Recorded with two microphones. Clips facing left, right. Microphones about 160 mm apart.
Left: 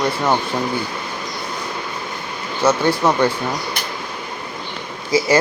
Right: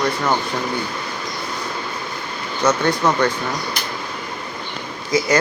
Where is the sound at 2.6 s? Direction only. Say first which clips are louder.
Left 2 dB; 10° left (ahead or behind).